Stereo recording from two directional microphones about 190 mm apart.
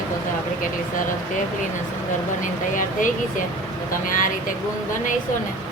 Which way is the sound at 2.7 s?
45° left (ahead or behind).